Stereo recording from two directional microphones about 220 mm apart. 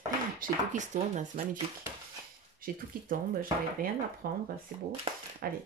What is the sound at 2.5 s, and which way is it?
Speech, 40° right (ahead or behind).